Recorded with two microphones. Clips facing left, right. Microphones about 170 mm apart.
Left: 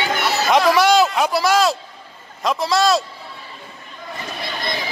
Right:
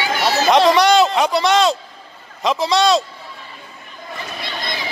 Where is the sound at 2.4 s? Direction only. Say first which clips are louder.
Right 2 dB; centre (ahead or behind).